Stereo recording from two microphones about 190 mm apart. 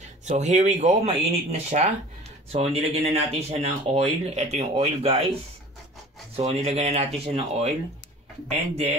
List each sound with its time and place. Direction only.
0.2 s speech: 35° right (ahead or behind)
6.3 s speech: 35° right (ahead or behind)